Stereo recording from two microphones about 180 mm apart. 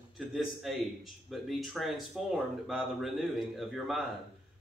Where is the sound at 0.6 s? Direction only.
Centre (ahead or behind).